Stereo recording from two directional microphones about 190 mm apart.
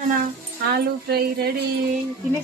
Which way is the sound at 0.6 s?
55° right (ahead or behind).